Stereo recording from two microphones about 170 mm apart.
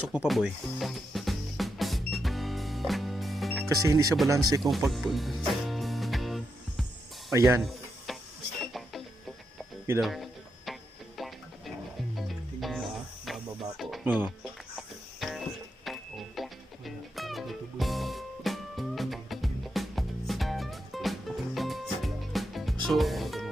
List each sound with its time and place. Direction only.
0.1 s music: 5° right (ahead or behind)
3.8 s speech: 20° right (ahead or behind)
4.7 s speech: centre (ahead or behind)
5.5 s music: centre (ahead or behind)
7.3 s speech: 15° right (ahead or behind)
7.6 s a sound: centre (ahead or behind)
8.6 s music: centre (ahead or behind)
10.0 s speech: centre (ahead or behind)
11.2 s music: centre (ahead or behind)